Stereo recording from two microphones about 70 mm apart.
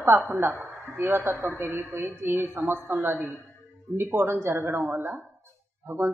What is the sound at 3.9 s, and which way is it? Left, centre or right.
Speech, right.